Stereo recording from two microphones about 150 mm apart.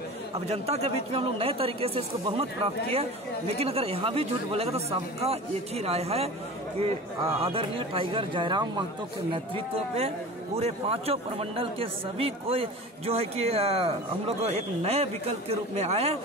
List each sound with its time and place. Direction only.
0.5 s a man's voice: 45° right (ahead or behind)
9.9 s a man's voice: 40° right (ahead or behind)